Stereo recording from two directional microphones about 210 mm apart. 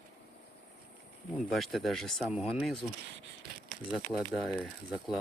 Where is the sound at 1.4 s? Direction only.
Centre (ahead or behind).